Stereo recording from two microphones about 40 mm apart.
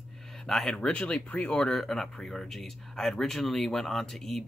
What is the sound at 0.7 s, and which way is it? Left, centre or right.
Speech, left.